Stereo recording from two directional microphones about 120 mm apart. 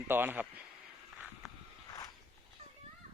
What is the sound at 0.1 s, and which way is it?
Speech, 15° right (ahead or behind).